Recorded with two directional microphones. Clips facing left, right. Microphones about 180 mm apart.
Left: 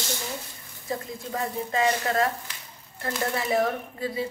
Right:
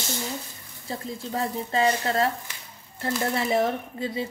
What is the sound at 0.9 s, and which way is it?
A woman's voice, 30° right (ahead or behind).